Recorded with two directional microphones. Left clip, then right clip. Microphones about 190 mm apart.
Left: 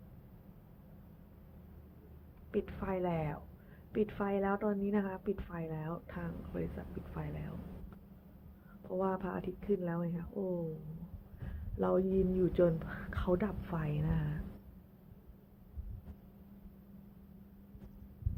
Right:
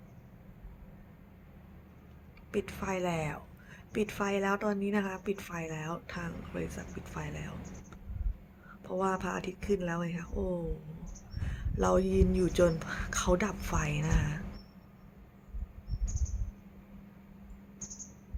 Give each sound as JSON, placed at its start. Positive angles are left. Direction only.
{"t": 2.5, "sound": "a woman's voice", "side_deg": -10}
{"t": 8.9, "sound": "a woman's voice", "side_deg": -10}
{"t": 11.8, "sound": "a woman's voice", "side_deg": -10}